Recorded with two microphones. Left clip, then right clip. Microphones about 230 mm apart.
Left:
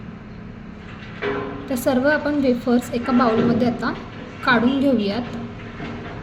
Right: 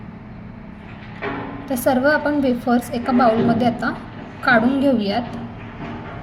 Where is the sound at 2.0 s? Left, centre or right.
Centre.